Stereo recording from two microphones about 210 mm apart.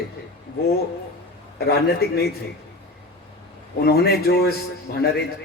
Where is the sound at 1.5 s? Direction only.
50° left (ahead or behind).